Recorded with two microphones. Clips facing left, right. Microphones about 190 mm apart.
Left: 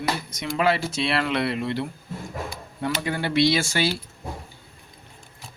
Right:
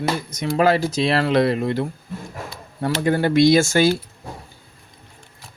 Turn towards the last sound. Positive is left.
turn(degrees=-45)  # may be behind; listen again after turning